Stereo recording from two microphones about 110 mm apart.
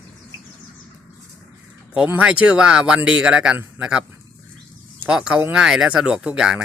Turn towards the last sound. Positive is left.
turn(degrees=-5)  # may be behind; listen again after turning